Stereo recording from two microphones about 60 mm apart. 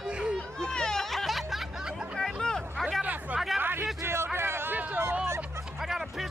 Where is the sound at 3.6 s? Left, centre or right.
Right.